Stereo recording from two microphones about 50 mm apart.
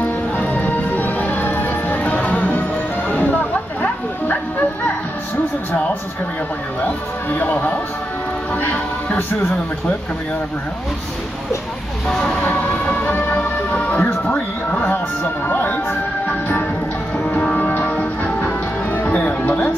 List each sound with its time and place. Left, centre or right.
0.0 s music: left
3.1 s bow-wow: left
6.8 s speech: left
12.1 s speech: centre
12.4 s music: left
15.4 s music: left